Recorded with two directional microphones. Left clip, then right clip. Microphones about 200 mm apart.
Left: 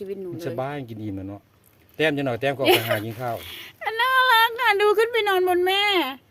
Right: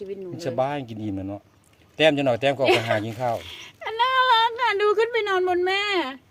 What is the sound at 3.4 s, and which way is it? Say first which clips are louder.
Speech: left 3 dB; 45° left (ahead or behind).